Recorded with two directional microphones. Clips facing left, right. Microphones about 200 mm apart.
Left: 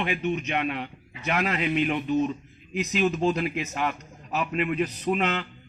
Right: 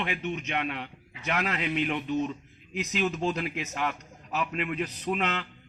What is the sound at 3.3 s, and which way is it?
A man's voice, 10° left (ahead or behind).